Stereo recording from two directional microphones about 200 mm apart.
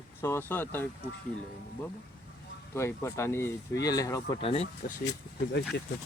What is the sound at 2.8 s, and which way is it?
Speech, 15° left (ahead or behind).